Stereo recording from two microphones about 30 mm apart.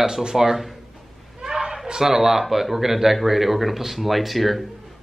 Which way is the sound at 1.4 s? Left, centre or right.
Centre.